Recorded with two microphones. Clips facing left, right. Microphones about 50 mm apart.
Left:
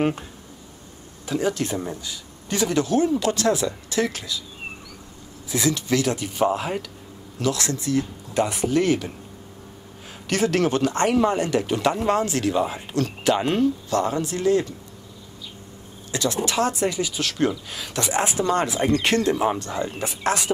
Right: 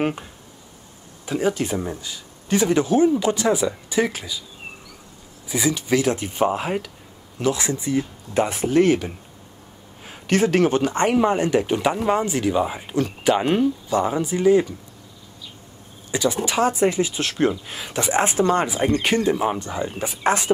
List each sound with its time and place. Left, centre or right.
1.2 s speech: centre
5.5 s speech: centre
16.1 s speech: centre
18.2 s speech: right
18.6 s speech: centre